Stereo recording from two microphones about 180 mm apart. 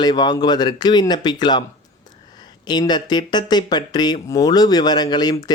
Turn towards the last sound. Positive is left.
turn(degrees=20)  # may be behind; listen again after turning